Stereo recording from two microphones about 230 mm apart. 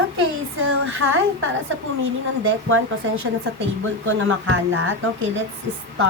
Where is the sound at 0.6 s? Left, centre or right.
Right.